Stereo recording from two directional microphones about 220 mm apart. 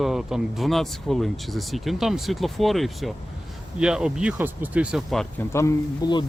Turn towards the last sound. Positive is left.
turn(degrees=15)  # may be behind; listen again after turning